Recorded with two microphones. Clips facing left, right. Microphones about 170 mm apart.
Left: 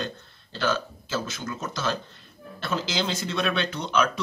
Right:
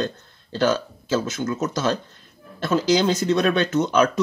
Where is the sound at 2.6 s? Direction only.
45° right (ahead or behind).